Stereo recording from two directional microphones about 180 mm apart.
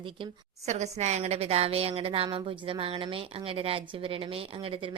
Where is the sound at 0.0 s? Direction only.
30° right (ahead or behind).